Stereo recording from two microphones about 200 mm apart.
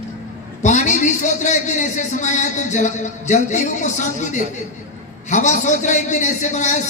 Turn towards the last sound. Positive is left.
turn(degrees=35)  # may be behind; listen again after turning